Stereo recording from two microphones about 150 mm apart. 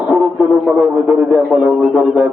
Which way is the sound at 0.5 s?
Centre (ahead or behind).